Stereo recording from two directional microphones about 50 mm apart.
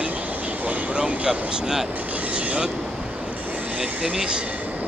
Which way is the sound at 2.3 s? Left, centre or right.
Right.